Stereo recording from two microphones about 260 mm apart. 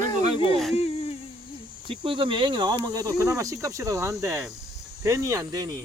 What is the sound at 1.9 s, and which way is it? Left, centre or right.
Speech, centre.